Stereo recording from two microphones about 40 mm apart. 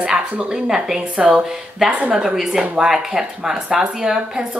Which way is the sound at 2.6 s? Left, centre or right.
Right.